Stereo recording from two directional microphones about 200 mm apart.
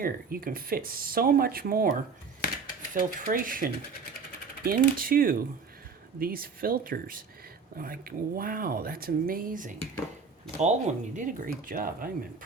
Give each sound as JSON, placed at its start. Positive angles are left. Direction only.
{"t": 0.0, "sound": "speech", "side_deg": -45}